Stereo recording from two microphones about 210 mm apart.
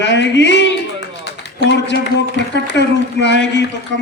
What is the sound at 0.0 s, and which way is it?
Speech, 55° left (ahead or behind).